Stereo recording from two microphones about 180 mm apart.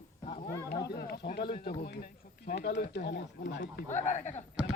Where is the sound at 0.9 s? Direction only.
55° left (ahead or behind).